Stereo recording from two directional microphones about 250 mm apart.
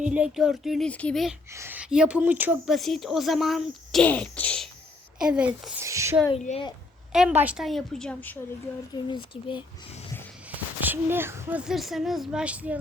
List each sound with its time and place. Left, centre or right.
0.1 s a woman's voice: centre
6.4 s speech: left
7.1 s a woman's voice: centre
9.0 s speech: centre
10.5 s a woman's voice: centre